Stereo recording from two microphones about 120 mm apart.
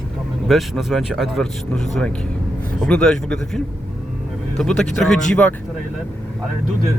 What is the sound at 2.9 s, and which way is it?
Speech, 5° left (ahead or behind).